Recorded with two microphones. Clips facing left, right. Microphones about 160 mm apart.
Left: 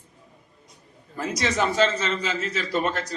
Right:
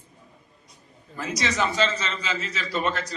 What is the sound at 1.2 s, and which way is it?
A man's voice, 50° left (ahead or behind).